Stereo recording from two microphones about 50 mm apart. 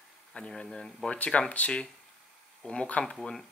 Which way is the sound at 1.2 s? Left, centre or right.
Left.